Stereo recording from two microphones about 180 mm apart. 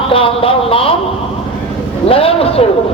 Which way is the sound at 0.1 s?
30° left (ahead or behind).